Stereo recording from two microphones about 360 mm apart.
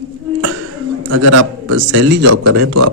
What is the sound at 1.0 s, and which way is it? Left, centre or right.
A man's voice, right.